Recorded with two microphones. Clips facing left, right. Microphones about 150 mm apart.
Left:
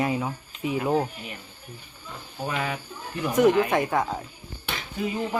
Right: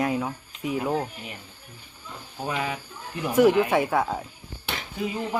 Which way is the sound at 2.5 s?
20° right (ahead or behind).